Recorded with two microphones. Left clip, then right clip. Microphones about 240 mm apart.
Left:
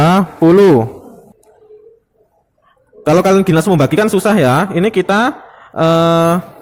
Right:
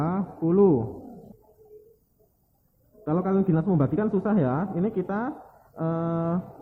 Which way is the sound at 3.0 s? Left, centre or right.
Left.